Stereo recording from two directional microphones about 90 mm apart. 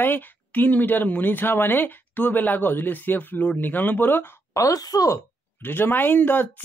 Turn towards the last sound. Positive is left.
turn(degrees=20)  # may be behind; listen again after turning